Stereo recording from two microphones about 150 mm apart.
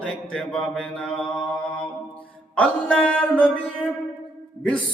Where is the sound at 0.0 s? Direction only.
5° left (ahead or behind).